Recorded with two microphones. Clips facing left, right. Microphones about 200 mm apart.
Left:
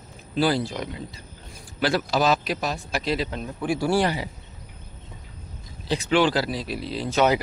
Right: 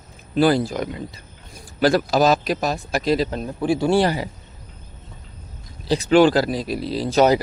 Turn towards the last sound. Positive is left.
turn(degrees=-35)  # may be behind; listen again after turning